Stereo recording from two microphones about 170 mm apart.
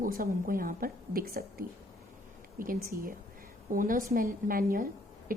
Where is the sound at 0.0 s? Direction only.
55° right (ahead or behind).